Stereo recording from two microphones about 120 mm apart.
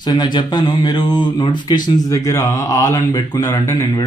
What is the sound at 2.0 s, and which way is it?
Speech, 25° left (ahead or behind).